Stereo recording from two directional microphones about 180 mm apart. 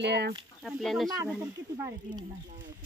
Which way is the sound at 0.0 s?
65° right (ahead or behind).